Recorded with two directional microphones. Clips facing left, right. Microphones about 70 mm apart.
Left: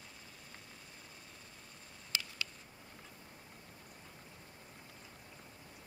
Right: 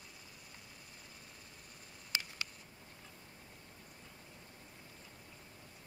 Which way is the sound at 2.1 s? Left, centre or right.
Right.